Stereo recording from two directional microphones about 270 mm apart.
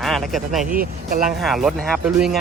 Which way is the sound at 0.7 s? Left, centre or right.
Right.